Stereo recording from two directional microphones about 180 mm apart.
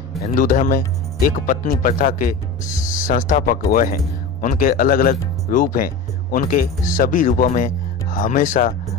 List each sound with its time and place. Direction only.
0.3 s speech: 50° left (ahead or behind)